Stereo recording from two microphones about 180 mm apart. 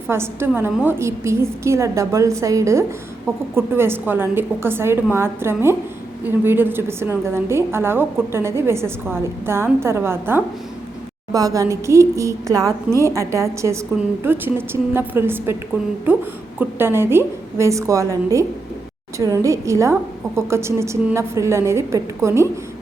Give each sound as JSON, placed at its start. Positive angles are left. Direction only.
{"t": 0.1, "sound": "a woman's voice", "side_deg": -15}
{"t": 19.2, "sound": "a woman's voice", "side_deg": -15}